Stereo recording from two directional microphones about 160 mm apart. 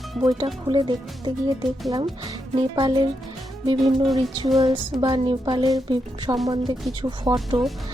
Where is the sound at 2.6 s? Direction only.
30° right (ahead or behind).